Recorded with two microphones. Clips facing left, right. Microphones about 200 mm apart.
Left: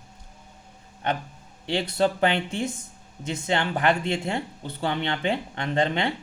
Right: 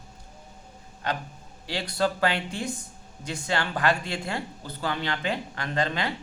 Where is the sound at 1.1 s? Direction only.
25° left (ahead or behind).